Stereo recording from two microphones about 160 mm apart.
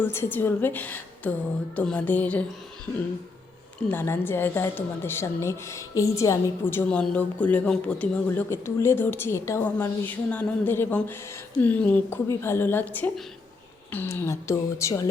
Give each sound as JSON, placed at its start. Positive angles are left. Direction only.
{"t": 0.0, "sound": "a woman's voice", "side_deg": 15}
{"t": 3.8, "sound": "a woman's voice", "side_deg": 15}